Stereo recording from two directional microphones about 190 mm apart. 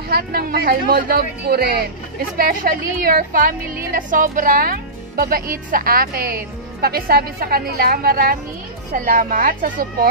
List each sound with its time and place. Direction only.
0.1 s a woman's voice: 55° right (ahead or behind)